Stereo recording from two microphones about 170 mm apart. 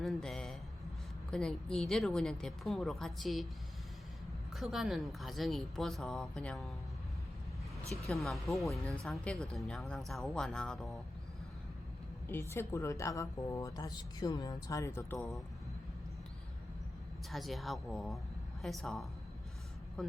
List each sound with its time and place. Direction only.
0.0 s a sound: centre (ahead or behind)
1.3 s a woman's voice: 5° left (ahead or behind)
4.5 s a woman's voice: centre (ahead or behind)
8.0 s a woman's voice: centre (ahead or behind)
12.3 s a woman's voice: 15° left (ahead or behind)
17.3 s a woman's voice: centre (ahead or behind)